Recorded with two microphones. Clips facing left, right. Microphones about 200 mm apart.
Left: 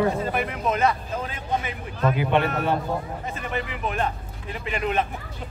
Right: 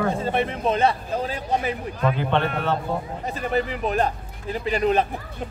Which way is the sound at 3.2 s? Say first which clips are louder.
Right 6 dB; 35° right (ahead or behind).